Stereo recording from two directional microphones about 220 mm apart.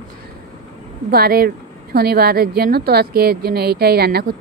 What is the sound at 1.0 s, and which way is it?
A woman's voice, 45° right (ahead or behind).